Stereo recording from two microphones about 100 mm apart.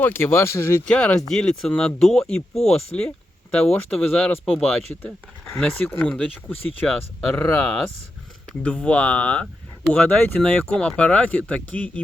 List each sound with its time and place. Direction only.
0.0 s speech: 20° left (ahead or behind)
0.9 s speech: 10° left (ahead or behind)
7.3 s speech: 10° left (ahead or behind)